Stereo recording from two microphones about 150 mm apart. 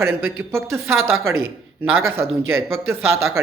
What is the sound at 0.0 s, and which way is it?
A man's voice, 15° right (ahead or behind).